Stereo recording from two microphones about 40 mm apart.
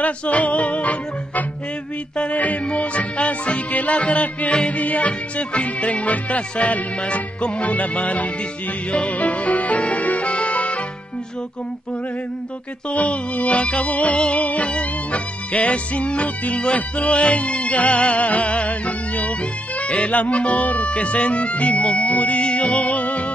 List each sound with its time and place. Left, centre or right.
0.0 s music: left
12.9 s music: left